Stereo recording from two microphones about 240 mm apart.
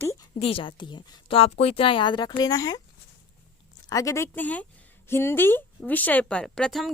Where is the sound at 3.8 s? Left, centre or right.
Centre.